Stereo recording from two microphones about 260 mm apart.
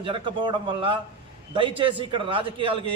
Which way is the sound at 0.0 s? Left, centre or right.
Centre.